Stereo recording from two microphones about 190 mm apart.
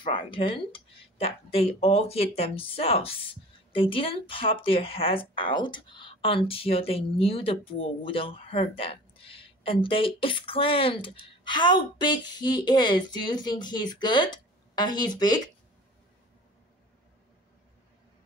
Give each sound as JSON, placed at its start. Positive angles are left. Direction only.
{"t": 0.0, "sound": "speech", "side_deg": 25}